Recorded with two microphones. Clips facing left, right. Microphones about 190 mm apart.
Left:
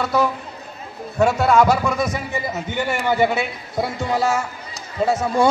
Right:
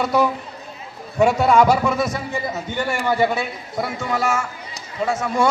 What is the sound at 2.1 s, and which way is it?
A man's voice, 20° left (ahead or behind).